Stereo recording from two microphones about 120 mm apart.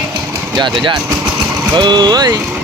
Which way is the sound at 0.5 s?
40° right (ahead or behind).